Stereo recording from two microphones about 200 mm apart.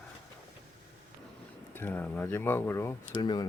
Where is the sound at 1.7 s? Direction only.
10° left (ahead or behind).